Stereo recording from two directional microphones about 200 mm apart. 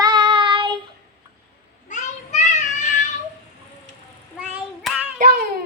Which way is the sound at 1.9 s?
35° left (ahead or behind).